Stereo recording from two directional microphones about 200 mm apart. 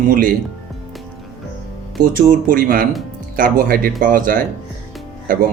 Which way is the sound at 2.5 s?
45° right (ahead or behind).